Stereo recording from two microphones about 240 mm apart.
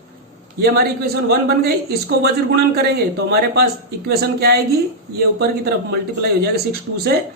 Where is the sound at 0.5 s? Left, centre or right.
Right.